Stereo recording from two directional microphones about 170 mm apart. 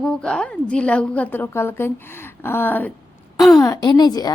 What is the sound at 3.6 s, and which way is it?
Speech, 20° left (ahead or behind).